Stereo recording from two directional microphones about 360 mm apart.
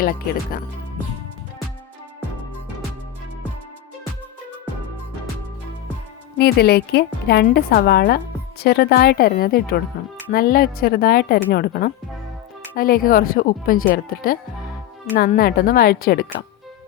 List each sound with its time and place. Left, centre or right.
0.0 s a woman's voice: left
6.3 s a woman's voice: left